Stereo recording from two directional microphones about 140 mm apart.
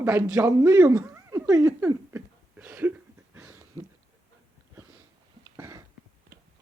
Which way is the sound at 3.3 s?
20° right (ahead or behind).